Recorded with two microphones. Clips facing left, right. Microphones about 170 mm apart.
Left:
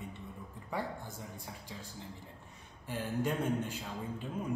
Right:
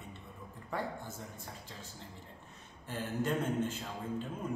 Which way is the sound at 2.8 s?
10° left (ahead or behind).